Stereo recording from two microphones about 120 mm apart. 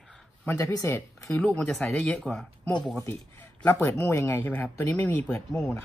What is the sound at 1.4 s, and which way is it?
Speech, 10° left (ahead or behind).